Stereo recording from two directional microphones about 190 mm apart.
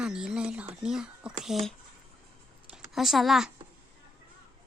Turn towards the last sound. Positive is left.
turn(degrees=0)  # may be behind; listen again after turning